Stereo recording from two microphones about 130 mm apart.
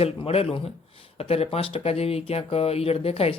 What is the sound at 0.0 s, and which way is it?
Speech, 50° left (ahead or behind).